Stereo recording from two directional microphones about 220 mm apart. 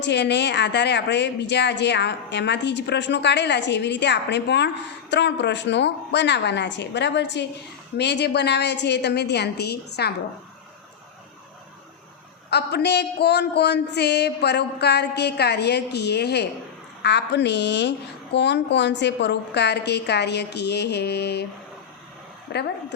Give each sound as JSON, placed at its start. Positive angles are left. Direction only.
{"t": 0.0, "sound": "a woman's voice", "side_deg": 50}
{"t": 12.5, "sound": "a woman's voice", "side_deg": 50}
{"t": 22.5, "sound": "a woman's voice", "side_deg": 50}